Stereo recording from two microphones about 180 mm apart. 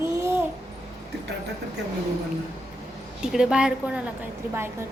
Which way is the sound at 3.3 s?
5° right (ahead or behind).